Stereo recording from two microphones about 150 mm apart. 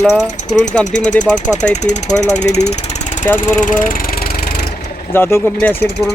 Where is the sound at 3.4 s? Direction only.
60° left (ahead or behind); by 4.6 s 90° left.